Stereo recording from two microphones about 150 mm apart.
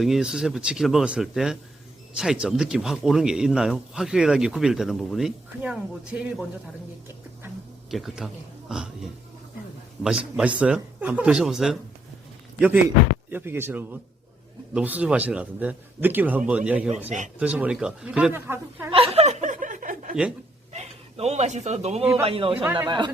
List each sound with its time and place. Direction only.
0.0 s speech: 5° right (ahead or behind)
7.9 s a man's voice: centre (ahead or behind)
18.9 s chuckle: 40° right (ahead or behind); by 20.1 s 60° right (ahead or behind)
20.7 s a man's voice: 45° right (ahead or behind); by 23.1 s 30° right (ahead or behind)